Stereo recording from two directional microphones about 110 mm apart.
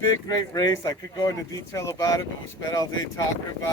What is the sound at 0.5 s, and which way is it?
Speech, 35° left (ahead or behind).